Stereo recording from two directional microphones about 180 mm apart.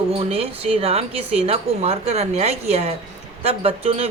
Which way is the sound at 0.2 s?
35° right (ahead or behind).